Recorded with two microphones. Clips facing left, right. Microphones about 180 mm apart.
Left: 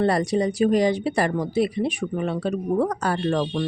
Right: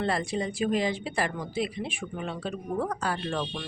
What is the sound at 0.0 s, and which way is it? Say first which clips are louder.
Speech: left 8 dB; 40° left (ahead or behind).